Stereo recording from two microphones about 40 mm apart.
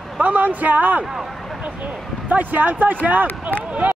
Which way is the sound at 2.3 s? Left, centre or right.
Right.